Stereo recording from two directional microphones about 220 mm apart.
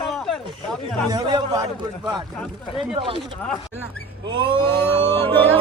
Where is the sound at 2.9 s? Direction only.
25° right (ahead or behind).